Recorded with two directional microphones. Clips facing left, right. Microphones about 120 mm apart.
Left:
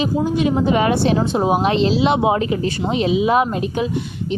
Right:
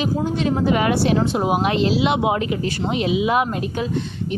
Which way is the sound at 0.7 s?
25° left (ahead or behind).